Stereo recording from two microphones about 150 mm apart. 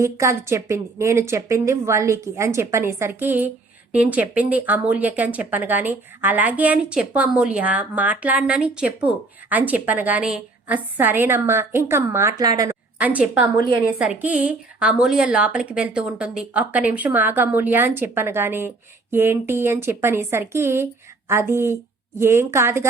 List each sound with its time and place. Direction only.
0.0 s a woman's voice: 20° right (ahead or behind)
13.0 s speech: 10° right (ahead or behind)